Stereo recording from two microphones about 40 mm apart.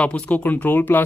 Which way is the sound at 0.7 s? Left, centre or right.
Left.